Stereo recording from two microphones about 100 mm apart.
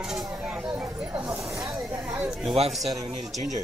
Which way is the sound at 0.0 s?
5° right (ahead or behind).